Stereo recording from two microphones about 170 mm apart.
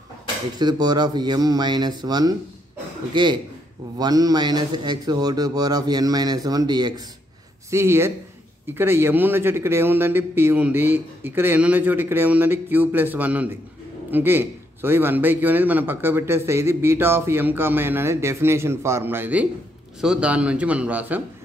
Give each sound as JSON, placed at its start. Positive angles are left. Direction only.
{"t": 0.6, "sound": "a man's voice", "side_deg": -25}